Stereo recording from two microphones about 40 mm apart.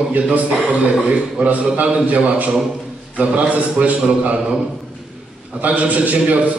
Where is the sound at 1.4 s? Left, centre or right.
Right.